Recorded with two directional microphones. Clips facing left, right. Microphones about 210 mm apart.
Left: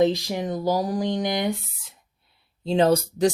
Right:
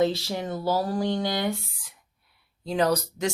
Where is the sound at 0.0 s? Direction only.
15° left (ahead or behind).